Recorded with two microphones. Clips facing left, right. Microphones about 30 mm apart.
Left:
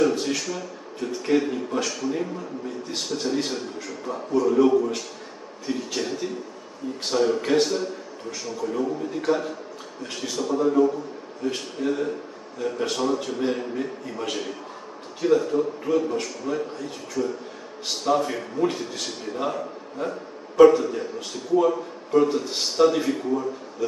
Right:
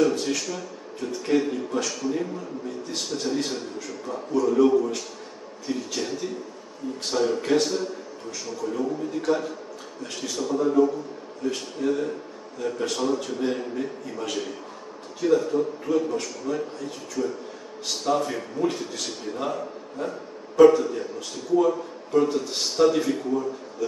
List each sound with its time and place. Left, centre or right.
0.0 s a man's voice: centre
17.8 s a man's voice: centre